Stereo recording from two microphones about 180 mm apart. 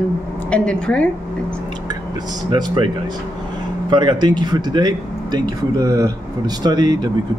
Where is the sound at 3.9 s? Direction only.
25° right (ahead or behind).